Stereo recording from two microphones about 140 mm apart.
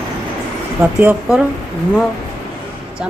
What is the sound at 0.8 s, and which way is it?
Speech, 10° right (ahead or behind).